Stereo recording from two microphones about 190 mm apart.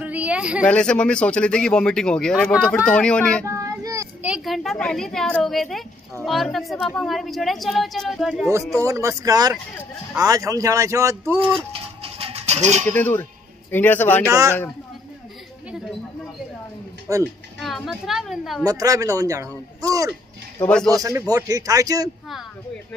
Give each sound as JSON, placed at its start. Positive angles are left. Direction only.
{"t": 0.0, "sound": "speech", "side_deg": -5}
{"t": 0.7, "sound": "speech", "side_deg": 5}
{"t": 3.4, "sound": "child singing", "side_deg": -15}
{"t": 4.3, "sound": "speech", "side_deg": 0}
{"t": 8.7, "sound": "speech", "side_deg": -15}
{"t": 11.7, "sound": "music", "side_deg": -30}
{"t": 12.8, "sound": "a man's voice", "side_deg": 10}
{"t": 17.1, "sound": "speech", "side_deg": -15}
{"t": 17.6, "sound": "speech", "side_deg": 0}
{"t": 18.6, "sound": "speech", "side_deg": -20}
{"t": 20.5, "sound": "speech", "side_deg": 5}
{"t": 20.9, "sound": "a man's voice", "side_deg": -15}